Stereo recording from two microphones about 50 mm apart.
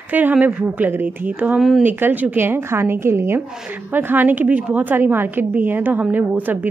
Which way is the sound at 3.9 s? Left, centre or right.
Right.